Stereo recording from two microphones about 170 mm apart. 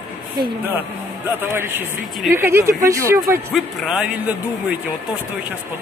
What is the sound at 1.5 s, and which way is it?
Speech, 15° right (ahead or behind).